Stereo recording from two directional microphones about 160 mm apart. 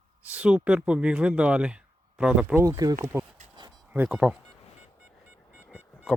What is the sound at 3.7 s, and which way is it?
Speech, 10° right (ahead or behind).